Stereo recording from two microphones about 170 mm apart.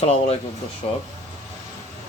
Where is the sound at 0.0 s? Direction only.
40° left (ahead or behind).